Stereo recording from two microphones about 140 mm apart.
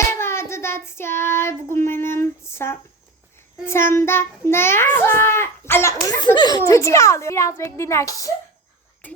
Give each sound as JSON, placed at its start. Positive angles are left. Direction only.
{"t": 0.0, "sound": "child singing", "side_deg": 20}
{"t": 3.7, "sound": "a child's voice", "side_deg": 15}
{"t": 6.1, "sound": "speech", "side_deg": 30}
{"t": 6.7, "sound": "a child's voice", "side_deg": 20}